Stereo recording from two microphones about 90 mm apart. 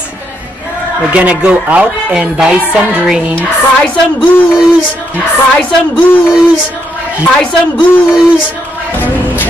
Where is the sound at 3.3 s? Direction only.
15° left (ahead or behind).